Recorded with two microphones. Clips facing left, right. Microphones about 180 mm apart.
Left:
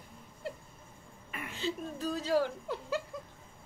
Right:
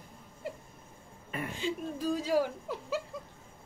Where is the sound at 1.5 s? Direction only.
10° right (ahead or behind).